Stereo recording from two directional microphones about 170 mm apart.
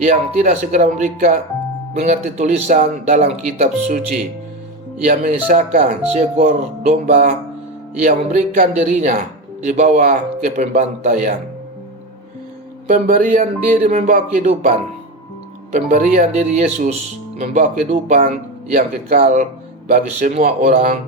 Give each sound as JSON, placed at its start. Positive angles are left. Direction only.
{"t": 0.0, "sound": "speech", "side_deg": -45}
{"t": 12.9, "sound": "speech", "side_deg": -50}